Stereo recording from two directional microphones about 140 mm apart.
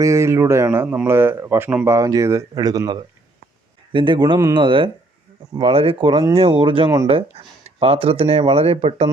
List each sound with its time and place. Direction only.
0.0 s speech: 20° right (ahead or behind); by 9.0 s 45° right (ahead or behind)